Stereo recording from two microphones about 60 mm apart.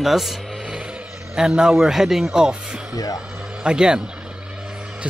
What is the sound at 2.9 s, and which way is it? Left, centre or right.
Speech, left.